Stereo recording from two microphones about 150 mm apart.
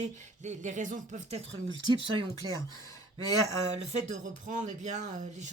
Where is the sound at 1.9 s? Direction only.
35° right (ahead or behind).